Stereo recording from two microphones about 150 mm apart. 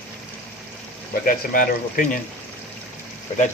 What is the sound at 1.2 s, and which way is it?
Speech, 70° left (ahead or behind).